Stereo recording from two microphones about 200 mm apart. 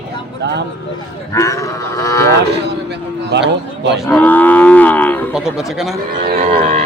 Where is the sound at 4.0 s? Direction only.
5° left (ahead or behind).